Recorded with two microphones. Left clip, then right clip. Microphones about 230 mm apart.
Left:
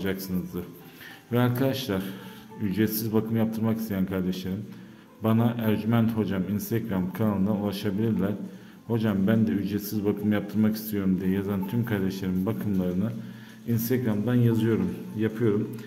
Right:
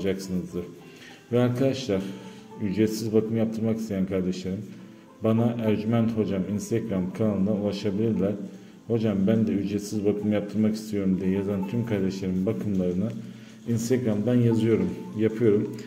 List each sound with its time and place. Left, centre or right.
0.0 s a man's voice: centre